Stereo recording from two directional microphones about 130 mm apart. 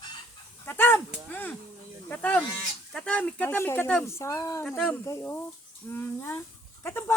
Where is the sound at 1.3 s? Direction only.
15° left (ahead or behind).